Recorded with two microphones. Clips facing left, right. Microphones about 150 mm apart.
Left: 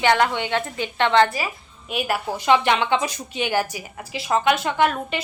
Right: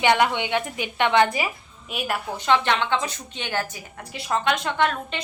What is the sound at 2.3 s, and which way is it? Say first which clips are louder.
A woman's voice: left 3 dB; 10° left (ahead or behind).